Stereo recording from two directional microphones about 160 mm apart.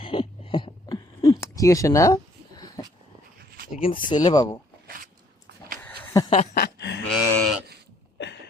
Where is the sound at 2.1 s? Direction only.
25° left (ahead or behind).